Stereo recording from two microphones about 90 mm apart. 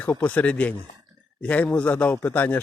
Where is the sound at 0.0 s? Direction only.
20° left (ahead or behind).